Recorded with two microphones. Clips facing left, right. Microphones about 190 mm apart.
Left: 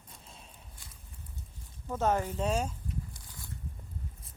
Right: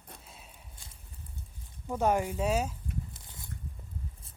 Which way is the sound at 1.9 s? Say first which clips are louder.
Right 2 dB; 10° right (ahead or behind).